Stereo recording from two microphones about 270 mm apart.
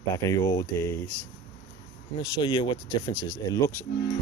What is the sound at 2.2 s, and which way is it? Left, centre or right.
Speech, centre.